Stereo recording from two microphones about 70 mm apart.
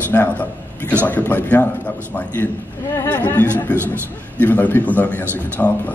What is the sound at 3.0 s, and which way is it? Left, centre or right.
A man's voice, left.